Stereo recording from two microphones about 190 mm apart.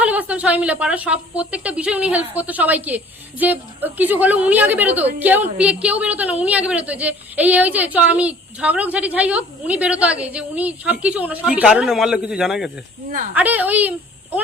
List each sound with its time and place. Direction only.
0.0 s a woman's voice: 10° right (ahead or behind)
13.1 s speech: 45° right (ahead or behind)
13.3 s a woman's voice: 10° right (ahead or behind)